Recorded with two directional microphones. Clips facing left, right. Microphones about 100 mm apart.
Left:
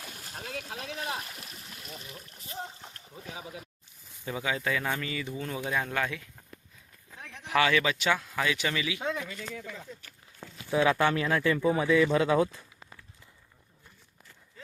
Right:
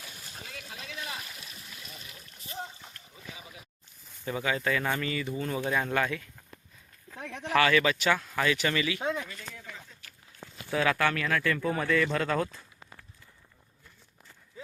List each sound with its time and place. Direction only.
0.3 s a sound: 60° left (ahead or behind)
0.9 s speech: 50° left (ahead or behind)
4.3 s speech: 5° left (ahead or behind)
7.2 s speech: 90° right
7.4 s speech: 5° left (ahead or behind)
10.7 s speech: 20° left (ahead or behind)